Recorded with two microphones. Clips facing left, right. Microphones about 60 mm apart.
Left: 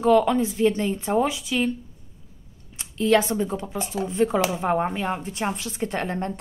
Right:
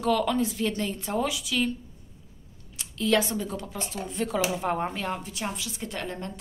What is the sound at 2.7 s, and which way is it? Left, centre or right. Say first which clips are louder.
Speech: left 5 dB; left.